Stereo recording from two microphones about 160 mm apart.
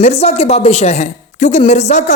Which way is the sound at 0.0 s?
40° left (ahead or behind).